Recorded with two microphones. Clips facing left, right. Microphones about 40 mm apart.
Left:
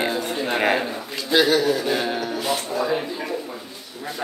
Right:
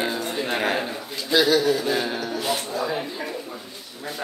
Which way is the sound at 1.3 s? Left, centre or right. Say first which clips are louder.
Left 2 dB; left.